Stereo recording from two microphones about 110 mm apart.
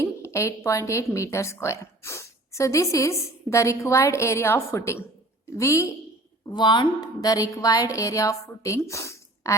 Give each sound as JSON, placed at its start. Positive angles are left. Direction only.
{"t": 0.0, "sound": "a woman's voice", "side_deg": 25}
{"t": 6.5, "sound": "a woman's voice", "side_deg": 45}